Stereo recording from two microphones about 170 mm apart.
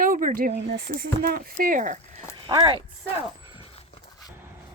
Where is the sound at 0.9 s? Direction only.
60° right (ahead or behind).